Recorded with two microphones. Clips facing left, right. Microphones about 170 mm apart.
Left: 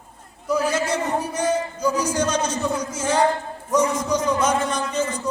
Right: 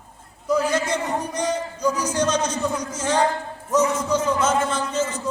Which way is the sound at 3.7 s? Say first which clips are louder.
Even; 15° left (ahead or behind).